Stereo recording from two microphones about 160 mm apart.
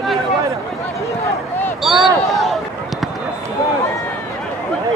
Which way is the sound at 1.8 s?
Centre (ahead or behind).